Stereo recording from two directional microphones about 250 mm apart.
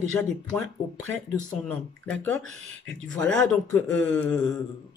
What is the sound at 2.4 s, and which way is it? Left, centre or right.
Speech, right.